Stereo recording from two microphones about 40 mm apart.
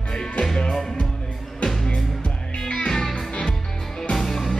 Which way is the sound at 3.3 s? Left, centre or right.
Left.